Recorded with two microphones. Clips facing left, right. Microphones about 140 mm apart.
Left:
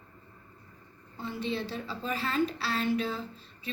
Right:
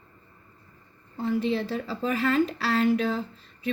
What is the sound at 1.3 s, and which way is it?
A woman's voice, 90° right.